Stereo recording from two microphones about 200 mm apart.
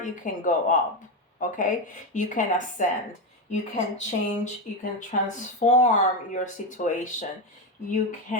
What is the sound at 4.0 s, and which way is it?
Speech, 35° left (ahead or behind).